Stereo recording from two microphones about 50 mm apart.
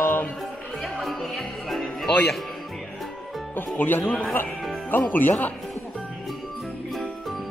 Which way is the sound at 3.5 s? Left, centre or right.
Left.